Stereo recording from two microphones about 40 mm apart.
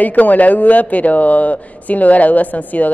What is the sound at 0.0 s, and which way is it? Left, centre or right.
Speech, left.